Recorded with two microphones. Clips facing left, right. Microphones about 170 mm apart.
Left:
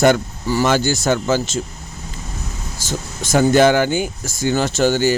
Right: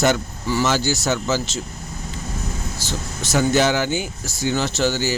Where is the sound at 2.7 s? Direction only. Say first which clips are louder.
Left 2 dB; 50° left (ahead or behind).